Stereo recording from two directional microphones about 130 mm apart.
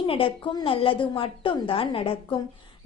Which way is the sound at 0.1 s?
45° left (ahead or behind).